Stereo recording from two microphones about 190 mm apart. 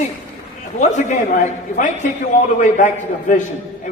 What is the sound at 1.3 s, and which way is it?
A man's voice, 40° left (ahead or behind).